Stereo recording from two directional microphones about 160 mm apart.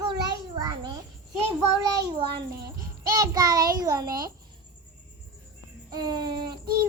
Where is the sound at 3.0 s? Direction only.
25° right (ahead or behind).